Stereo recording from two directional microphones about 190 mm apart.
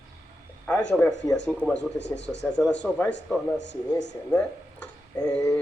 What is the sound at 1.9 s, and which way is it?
Speech, 65° left (ahead or behind).